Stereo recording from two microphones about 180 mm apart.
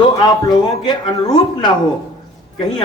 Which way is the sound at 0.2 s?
25° left (ahead or behind).